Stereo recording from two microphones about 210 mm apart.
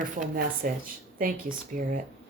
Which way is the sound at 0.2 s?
40° right (ahead or behind).